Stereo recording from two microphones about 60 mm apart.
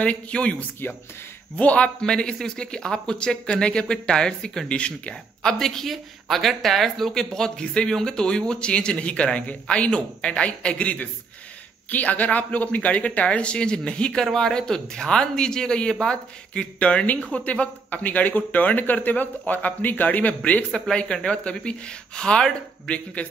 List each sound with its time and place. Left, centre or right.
0.0 s speech: centre